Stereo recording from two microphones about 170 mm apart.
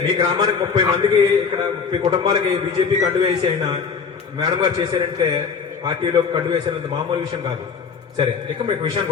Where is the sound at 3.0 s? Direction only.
25° right (ahead or behind).